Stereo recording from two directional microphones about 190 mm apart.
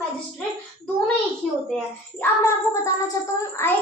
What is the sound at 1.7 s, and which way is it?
Child singing, 10° left (ahead or behind).